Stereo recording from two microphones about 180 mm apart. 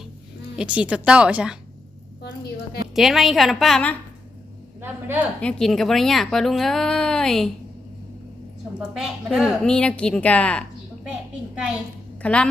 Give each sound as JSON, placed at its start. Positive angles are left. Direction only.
{"t": 0.5, "sound": "speech", "side_deg": -5}
{"t": 2.9, "sound": "speech", "side_deg": 0}
{"t": 4.8, "sound": "a woman's voice", "side_deg": -10}
{"t": 5.4, "sound": "speech", "side_deg": 5}
{"t": 8.8, "sound": "speech", "side_deg": 0}
{"t": 11.5, "sound": "speech", "side_deg": -5}
{"t": 12.2, "sound": "a woman's voice", "side_deg": 5}